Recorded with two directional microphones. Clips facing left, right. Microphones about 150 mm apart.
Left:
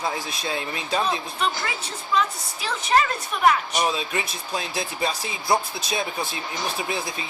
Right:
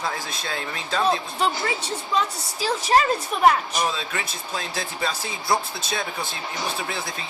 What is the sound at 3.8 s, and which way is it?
Speech, 15° left (ahead or behind).